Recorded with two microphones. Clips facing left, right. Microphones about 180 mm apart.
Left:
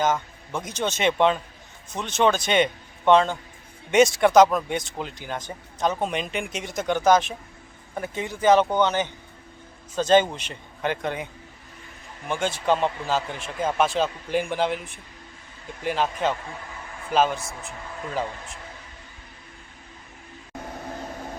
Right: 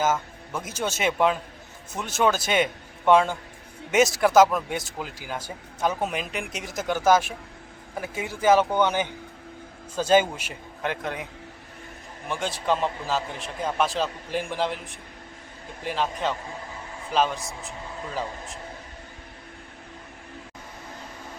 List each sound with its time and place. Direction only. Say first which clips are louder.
0.0 s a man's voice: left 1 dB; 5° right (ahead or behind)
12.3 s speech: left 3 dB; centre (ahead or behind)